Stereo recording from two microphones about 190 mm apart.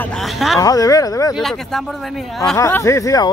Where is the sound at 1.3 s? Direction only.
Centre (ahead or behind).